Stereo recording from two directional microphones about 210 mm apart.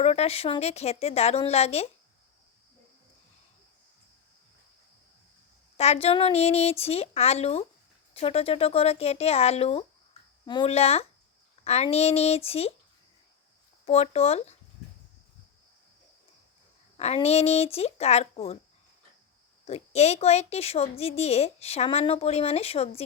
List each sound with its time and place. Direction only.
0.0 s a woman's voice: 30° left (ahead or behind)
5.7 s a woman's voice: 30° left (ahead or behind)
13.8 s a woman's voice: 30° left (ahead or behind)
17.0 s a woman's voice: 30° left (ahead or behind)
19.6 s a woman's voice: 30° left (ahead or behind)